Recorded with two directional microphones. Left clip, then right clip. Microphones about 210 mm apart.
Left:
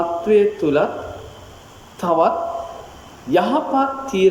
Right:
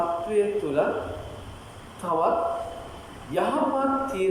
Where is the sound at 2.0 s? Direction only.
45° left (ahead or behind).